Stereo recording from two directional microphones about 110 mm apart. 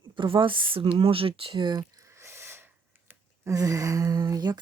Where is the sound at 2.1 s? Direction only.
25° right (ahead or behind).